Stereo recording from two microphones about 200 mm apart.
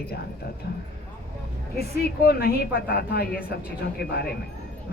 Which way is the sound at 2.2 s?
50° left (ahead or behind).